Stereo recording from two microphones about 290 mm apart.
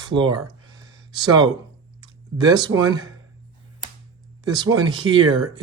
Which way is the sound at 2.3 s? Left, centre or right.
Centre.